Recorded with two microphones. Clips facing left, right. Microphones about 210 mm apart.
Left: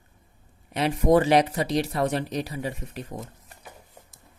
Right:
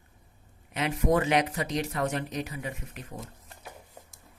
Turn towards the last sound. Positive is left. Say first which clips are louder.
# left 5 dB
turn(degrees=30)  # may be behind; listen again after turning